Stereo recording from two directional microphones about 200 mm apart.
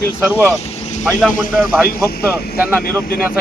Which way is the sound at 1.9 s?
50° left (ahead or behind).